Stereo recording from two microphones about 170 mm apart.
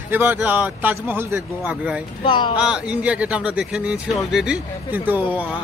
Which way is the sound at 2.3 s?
30° left (ahead or behind).